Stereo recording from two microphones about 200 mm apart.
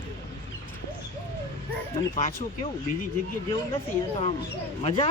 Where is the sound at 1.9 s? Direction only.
30° left (ahead or behind).